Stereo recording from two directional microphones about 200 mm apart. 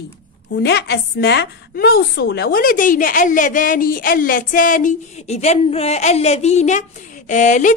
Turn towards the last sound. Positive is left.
turn(degrees=40)  # may be behind; listen again after turning